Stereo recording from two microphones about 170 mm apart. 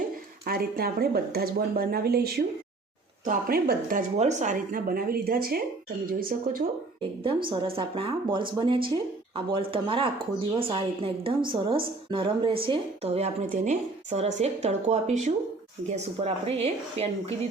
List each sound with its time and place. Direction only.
0.4 s speech: 60° right (ahead or behind)
7.5 s a woman's voice: 30° right (ahead or behind)